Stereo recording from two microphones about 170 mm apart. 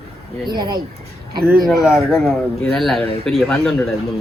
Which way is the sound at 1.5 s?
Centre (ahead or behind).